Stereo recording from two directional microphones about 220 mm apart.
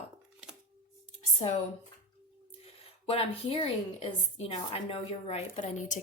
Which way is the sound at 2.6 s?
25° left (ahead or behind).